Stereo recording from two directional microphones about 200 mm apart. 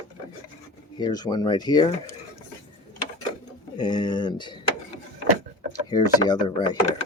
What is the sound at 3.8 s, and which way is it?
Speech, 20° left (ahead or behind).